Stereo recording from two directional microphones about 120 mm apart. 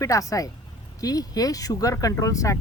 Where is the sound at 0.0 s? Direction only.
30° left (ahead or behind).